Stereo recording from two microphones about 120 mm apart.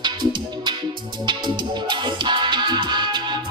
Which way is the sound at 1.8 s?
40° right (ahead or behind).